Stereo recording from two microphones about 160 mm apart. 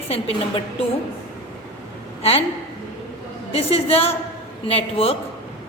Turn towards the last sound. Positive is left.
turn(degrees=35)  # may be behind; listen again after turning